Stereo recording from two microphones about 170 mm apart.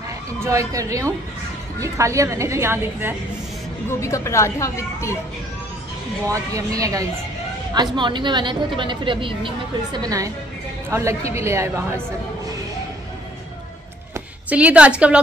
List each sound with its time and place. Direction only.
0.4 s a woman's voice: 20° right (ahead or behind)
4.0 s speech: 15° left (ahead or behind)
6.2 s a woman's voice: 20° right (ahead or behind)
14.1 s a woman's voice: 10° right (ahead or behind)